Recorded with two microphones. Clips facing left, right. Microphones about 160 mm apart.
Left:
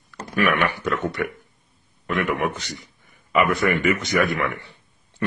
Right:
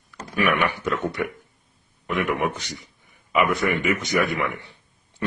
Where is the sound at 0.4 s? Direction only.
15° right (ahead or behind).